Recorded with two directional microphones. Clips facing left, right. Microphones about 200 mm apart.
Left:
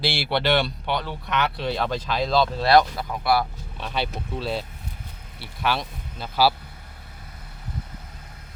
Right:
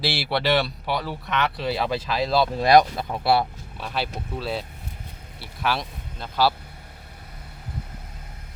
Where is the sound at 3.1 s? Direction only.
30° right (ahead or behind).